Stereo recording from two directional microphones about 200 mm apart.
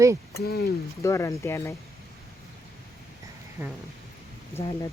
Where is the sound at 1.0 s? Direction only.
15° left (ahead or behind).